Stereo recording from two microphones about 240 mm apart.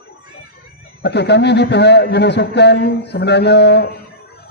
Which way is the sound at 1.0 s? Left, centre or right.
Left.